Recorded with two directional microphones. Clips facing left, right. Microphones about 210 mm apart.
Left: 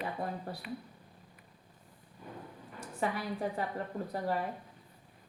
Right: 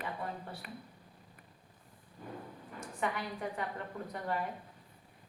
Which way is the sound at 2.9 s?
35° left (ahead or behind).